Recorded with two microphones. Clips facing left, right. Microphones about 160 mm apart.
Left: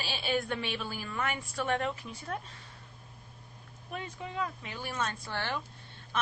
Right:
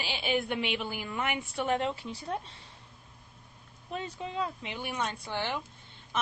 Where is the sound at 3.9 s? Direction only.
25° right (ahead or behind).